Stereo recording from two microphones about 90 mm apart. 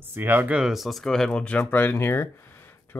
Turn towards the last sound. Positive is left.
turn(degrees=35)  # may be behind; listen again after turning